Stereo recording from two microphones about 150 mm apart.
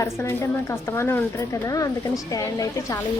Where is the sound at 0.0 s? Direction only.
15° left (ahead or behind).